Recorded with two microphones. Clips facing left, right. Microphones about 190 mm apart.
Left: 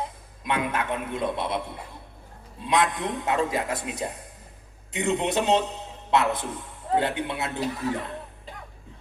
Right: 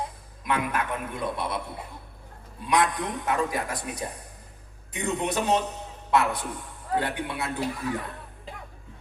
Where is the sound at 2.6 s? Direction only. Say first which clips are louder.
Left 1 dB; 25° left (ahead or behind).